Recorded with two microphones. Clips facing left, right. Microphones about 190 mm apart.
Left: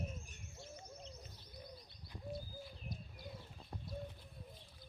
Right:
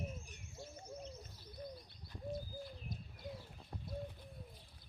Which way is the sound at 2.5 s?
10° right (ahead or behind).